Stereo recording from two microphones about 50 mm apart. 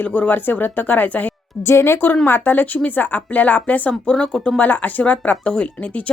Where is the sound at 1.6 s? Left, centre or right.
Left.